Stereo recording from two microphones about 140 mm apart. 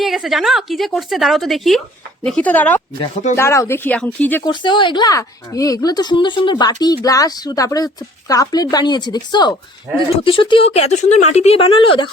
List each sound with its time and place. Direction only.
0.0 s a woman's voice: centre (ahead or behind)
4.4 s speech: 35° left (ahead or behind)